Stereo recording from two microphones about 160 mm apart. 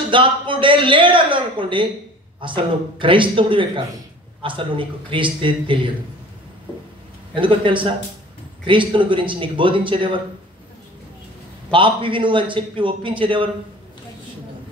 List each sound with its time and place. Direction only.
0.1 s a man's voice: 30° right (ahead or behind)
7.3 s a man's voice: 30° right (ahead or behind)
11.7 s a man's voice: 30° right (ahead or behind)